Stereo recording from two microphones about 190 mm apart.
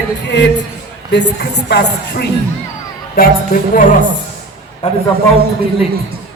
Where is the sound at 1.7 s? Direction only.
55° left (ahead or behind).